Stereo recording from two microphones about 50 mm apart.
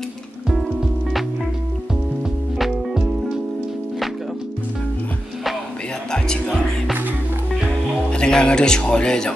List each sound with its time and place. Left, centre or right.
0.5 s music: centre
2.6 s music: centre
6.1 s music: centre
8.1 s speech: centre